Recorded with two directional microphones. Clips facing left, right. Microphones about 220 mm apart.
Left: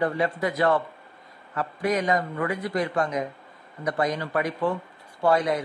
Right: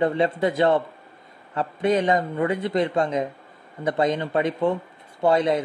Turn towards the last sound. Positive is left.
turn(degrees=-25)  # may be behind; listen again after turning